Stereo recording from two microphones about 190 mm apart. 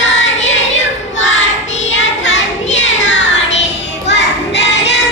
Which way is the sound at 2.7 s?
75° left (ahead or behind).